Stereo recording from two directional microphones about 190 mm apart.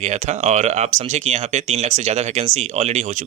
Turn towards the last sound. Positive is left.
turn(degrees=-35)  # may be behind; listen again after turning